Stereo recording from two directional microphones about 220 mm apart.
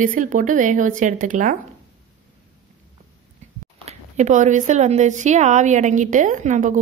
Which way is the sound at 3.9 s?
30° right (ahead or behind).